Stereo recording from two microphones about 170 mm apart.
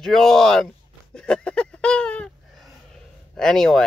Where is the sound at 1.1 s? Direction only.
5° left (ahead or behind).